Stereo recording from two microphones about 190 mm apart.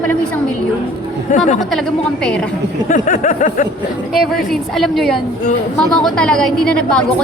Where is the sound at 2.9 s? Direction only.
45° left (ahead or behind).